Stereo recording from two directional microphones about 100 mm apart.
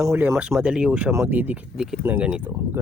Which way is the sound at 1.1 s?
25° right (ahead or behind).